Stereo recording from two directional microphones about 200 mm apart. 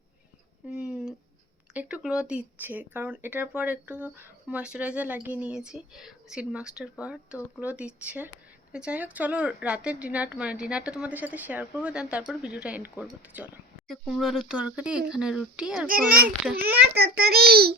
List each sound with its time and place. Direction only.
0.7 s a sound: 5° right (ahead or behind)
1.7 s speech: 5° right (ahead or behind)
15.9 s a child's voice: 45° right (ahead or behind)